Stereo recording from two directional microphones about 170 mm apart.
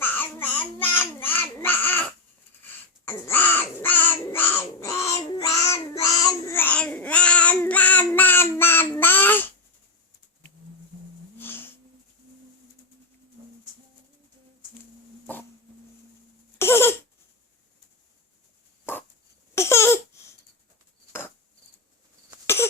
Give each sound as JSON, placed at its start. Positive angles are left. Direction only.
{"t": 0.0, "sound": "babbling", "side_deg": 10}
{"t": 3.1, "sound": "crow", "side_deg": 15}
{"t": 11.3, "sound": "a sound", "side_deg": 15}
{"t": 16.6, "sound": "a sound", "side_deg": 15}
{"t": 18.9, "sound": "dog", "side_deg": 15}
{"t": 19.5, "sound": "laughter", "side_deg": 15}
{"t": 21.1, "sound": "cricket", "side_deg": 15}